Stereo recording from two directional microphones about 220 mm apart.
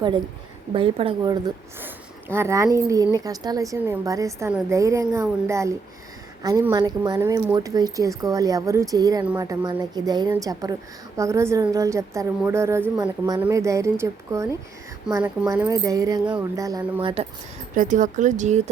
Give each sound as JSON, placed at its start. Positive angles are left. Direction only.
{"t": 0.7, "sound": "a woman's voice", "side_deg": -25}
{"t": 17.7, "sound": "speech", "side_deg": -35}